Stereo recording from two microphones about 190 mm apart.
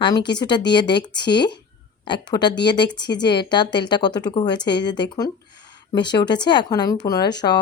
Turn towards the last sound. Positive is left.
turn(degrees=20)  # may be behind; listen again after turning